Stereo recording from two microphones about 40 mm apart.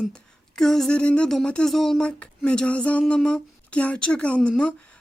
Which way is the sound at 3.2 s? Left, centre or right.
Left.